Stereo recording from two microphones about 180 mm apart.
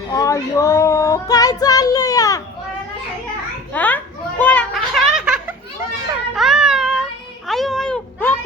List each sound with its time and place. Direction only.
0.1 s child singing: 20° left (ahead or behind)
3.7 s children playing: 10° left (ahead or behind)
6.3 s cat: centre (ahead or behind)